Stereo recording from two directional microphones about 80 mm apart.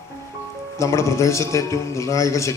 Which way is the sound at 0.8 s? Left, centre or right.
Left.